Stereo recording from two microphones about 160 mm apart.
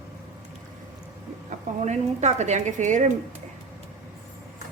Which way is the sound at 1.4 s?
45° right (ahead or behind).